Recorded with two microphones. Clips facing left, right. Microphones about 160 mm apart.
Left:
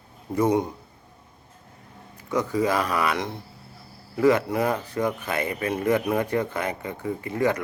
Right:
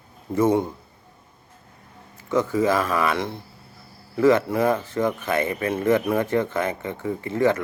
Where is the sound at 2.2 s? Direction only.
15° left (ahead or behind).